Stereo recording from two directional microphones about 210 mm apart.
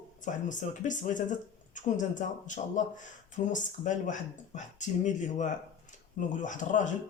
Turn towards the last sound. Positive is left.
turn(degrees=35)  # may be behind; listen again after turning